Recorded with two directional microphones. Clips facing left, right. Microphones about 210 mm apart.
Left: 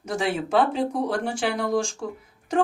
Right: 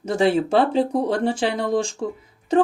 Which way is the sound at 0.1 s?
25° right (ahead or behind).